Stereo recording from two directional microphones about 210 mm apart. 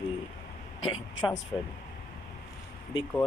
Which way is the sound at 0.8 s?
25° left (ahead or behind).